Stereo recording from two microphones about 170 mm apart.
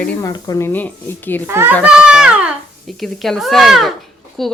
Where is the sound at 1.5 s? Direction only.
15° right (ahead or behind).